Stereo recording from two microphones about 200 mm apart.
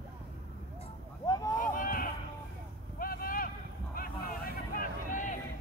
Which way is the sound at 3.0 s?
45° left (ahead or behind).